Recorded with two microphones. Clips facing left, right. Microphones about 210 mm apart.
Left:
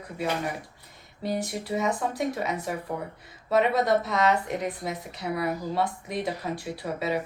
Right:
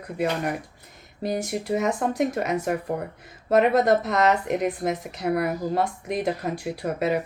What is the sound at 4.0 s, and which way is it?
Speech, 60° right (ahead or behind).